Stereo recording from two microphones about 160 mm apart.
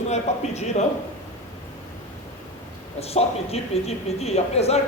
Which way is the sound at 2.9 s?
40° left (ahead or behind).